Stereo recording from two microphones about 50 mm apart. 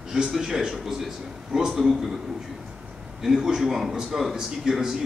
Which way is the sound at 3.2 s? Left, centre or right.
Centre.